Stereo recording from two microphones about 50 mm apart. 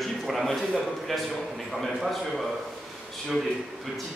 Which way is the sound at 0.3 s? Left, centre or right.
Centre.